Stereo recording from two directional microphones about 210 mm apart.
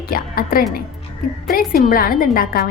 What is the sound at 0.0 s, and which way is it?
A woman's voice, 45° left (ahead or behind).